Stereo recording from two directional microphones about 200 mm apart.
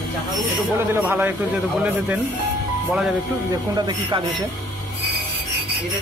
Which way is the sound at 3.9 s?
20° right (ahead or behind).